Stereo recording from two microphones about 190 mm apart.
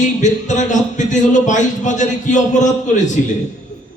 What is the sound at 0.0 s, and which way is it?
Speech, 40° left (ahead or behind).